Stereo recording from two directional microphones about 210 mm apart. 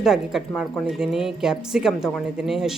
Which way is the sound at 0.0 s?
Centre (ahead or behind).